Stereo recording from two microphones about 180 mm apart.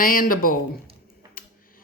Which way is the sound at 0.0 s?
50° left (ahead or behind).